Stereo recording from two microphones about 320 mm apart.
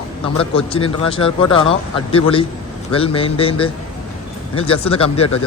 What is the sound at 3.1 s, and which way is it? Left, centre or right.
Speech, centre.